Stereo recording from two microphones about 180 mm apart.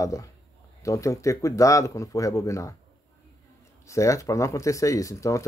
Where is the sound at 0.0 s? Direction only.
20° left (ahead or behind).